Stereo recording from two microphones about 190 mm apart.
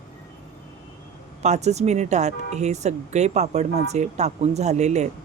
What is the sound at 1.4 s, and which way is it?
Speech, 35° right (ahead or behind).